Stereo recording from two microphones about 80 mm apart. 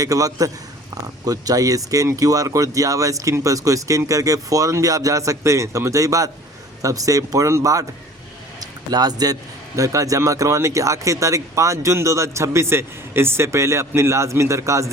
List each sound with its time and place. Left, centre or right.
0.0 s speech: right
8.6 s a man's voice: right